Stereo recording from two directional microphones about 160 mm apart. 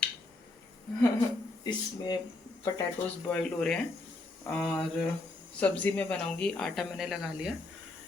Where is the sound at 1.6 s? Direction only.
25° left (ahead or behind).